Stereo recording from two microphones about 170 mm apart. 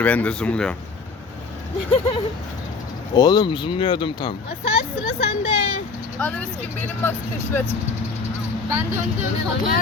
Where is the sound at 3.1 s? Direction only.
25° left (ahead or behind).